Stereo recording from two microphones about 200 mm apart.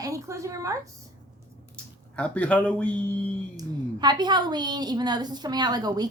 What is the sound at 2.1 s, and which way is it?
Speech, 5° left (ahead or behind).